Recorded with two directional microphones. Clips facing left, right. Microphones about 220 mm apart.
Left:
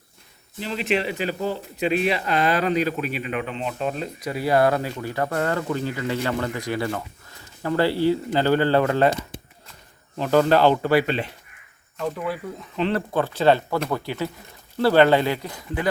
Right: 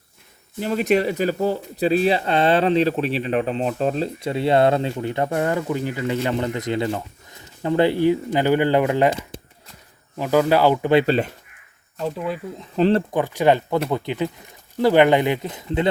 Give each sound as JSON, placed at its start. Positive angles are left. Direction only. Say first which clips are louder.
{"t": 0.6, "sound": "speech", "louder": "right 5 dB", "side_deg": -45}
{"t": 10.2, "sound": "speech", "louder": "even", "side_deg": -10}
{"t": 11.0, "sound": "speech", "louder": "right 6 dB", "side_deg": -35}
{"t": 12.1, "sound": "speech", "louder": "right 2 dB", "side_deg": -20}
{"t": 12.7, "sound": "speech", "louder": "right 6 dB", "side_deg": -40}
{"t": 13.1, "sound": "speech", "louder": "right 1 dB", "side_deg": -15}